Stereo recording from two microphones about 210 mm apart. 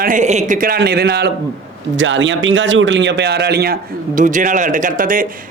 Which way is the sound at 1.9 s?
65° right (ahead or behind).